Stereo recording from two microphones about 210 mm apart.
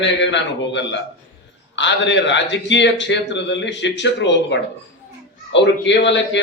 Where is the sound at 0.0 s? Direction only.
60° left (ahead or behind).